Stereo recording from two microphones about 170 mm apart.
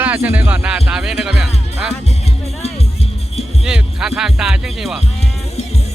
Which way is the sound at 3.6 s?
5° right (ahead or behind).